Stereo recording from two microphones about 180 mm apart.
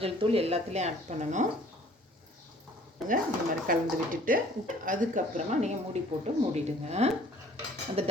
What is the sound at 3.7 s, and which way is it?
A woman's voice, 50° right (ahead or behind).